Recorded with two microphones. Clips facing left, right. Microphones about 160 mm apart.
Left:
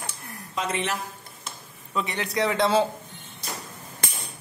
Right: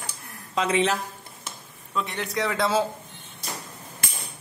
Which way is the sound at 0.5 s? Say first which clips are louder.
Right 5 dB; 90° right.